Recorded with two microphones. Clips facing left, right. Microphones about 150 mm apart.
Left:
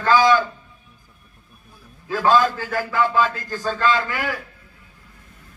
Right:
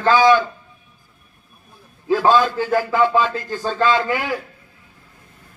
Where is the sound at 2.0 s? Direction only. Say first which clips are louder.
Right 2 dB; 20° right (ahead or behind).